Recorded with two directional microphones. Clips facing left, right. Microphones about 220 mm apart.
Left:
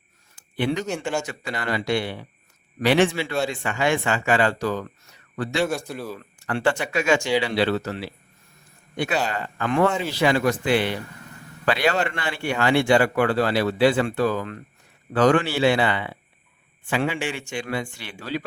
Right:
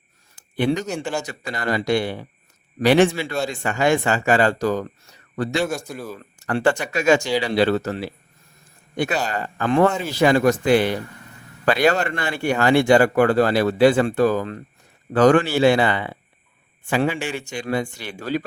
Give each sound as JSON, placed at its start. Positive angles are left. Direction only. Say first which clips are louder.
{"t": 0.5, "sound": "speech", "louder": "right 3 dB", "side_deg": -45}
{"t": 0.9, "sound": "speech", "louder": "even", "side_deg": -5}
{"t": 1.2, "sound": "speech", "louder": "right 2 dB", "side_deg": -40}
{"t": 5.9, "sound": "speech", "louder": "even", "side_deg": 0}
{"t": 6.4, "sound": "speech", "louder": "right 3 dB", "side_deg": -45}
{"t": 9.3, "sound": "speech", "louder": "right 4 dB", "side_deg": -40}